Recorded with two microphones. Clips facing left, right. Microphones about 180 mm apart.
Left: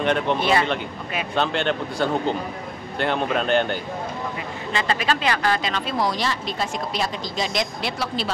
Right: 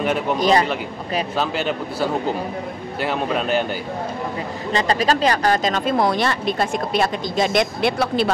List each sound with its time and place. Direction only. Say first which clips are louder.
0.0 s speech: even; 5° right (ahead or behind)
0.4 s speech: right 4 dB; 40° right (ahead or behind)
1.3 s speech: left 4 dB; 5° right (ahead or behind)
4.7 s speech: right 5 dB; 40° right (ahead or behind); by 8.3 s 55° right (ahead or behind)